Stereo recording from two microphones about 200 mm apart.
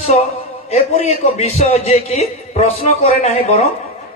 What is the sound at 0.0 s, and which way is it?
A man's voice, 30° left (ahead or behind).